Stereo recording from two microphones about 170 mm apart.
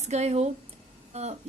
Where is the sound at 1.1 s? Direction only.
40° right (ahead or behind).